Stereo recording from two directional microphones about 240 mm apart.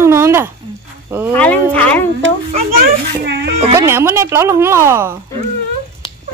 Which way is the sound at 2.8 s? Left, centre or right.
Right.